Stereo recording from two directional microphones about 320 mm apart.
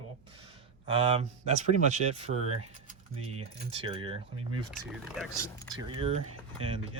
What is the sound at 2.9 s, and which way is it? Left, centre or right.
Speech, centre.